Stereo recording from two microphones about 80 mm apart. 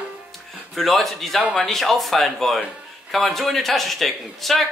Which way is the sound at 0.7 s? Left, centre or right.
Centre.